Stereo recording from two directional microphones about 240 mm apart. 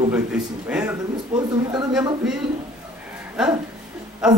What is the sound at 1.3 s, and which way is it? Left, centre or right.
Speech, centre.